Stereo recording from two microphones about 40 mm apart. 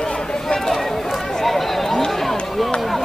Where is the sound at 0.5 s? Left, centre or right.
Centre.